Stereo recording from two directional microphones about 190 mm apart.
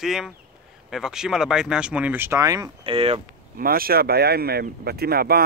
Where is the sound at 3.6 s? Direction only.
50° right (ahead or behind).